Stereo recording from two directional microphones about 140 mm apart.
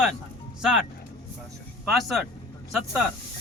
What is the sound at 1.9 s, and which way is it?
Speech, centre (ahead or behind).